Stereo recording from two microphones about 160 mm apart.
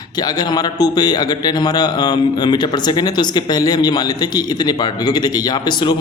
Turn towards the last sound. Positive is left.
turn(degrees=25)  # may be behind; listen again after turning